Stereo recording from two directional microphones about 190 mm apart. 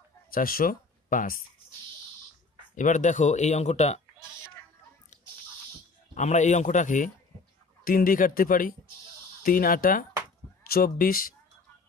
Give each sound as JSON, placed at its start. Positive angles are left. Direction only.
{"t": 0.3, "sound": "speech", "side_deg": 50}
{"t": 2.7, "sound": "speech", "side_deg": 40}
{"t": 6.1, "sound": "speech", "side_deg": 40}